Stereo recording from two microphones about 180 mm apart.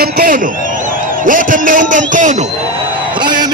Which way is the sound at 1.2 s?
50° right (ahead or behind).